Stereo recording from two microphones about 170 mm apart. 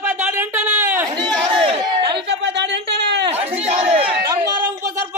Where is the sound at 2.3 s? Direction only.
90° right.